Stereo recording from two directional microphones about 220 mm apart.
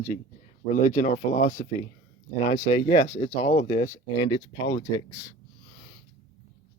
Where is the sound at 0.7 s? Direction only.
35° left (ahead or behind).